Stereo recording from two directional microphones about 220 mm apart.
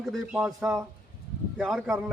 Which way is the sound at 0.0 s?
Centre (ahead or behind).